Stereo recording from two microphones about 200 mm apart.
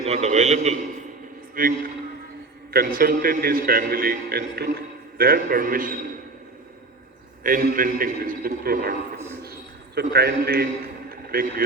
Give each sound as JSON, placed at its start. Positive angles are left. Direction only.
{"t": 0.0, "sound": "a man's voice", "side_deg": -35}
{"t": 1.5, "sound": "a man's voice", "side_deg": -45}
{"t": 7.4, "sound": "a man's voice", "side_deg": -45}
{"t": 9.4, "sound": "a sound", "side_deg": -55}